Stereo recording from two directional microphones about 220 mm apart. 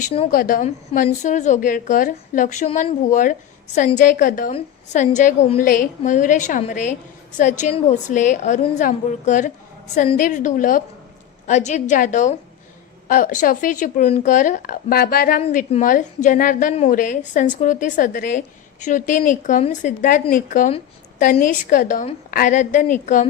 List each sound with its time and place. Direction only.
0.3 s a woman's voice: 40° left (ahead or behind)